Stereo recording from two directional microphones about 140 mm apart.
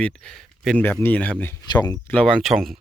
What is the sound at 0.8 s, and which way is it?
Speech, 15° left (ahead or behind).